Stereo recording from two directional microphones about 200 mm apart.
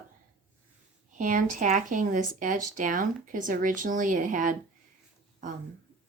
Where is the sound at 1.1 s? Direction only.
40° right (ahead or behind).